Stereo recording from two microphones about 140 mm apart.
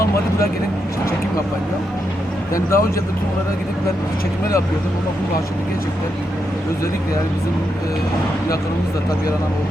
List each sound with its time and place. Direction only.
2.6 s speech: 20° left (ahead or behind)